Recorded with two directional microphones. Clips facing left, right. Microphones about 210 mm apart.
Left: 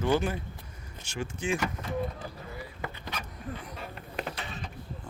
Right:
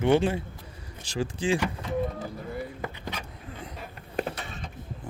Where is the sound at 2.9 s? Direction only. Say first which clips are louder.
Right 2 dB; 15° right (ahead or behind).